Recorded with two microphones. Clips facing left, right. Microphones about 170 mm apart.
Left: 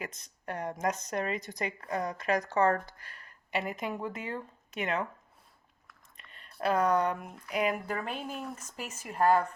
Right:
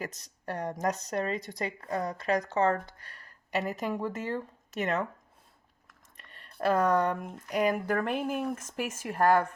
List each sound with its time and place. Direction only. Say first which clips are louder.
0.0 s speech: right 2 dB; 40° right (ahead or behind)
3.0 s speech: even; 40° right (ahead or behind)
6.6 s speech: right 2 dB; 45° right (ahead or behind)
7.9 s speech: right 6 dB; 60° right (ahead or behind)